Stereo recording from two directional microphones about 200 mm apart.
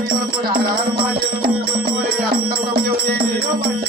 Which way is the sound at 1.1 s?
50° right (ahead or behind).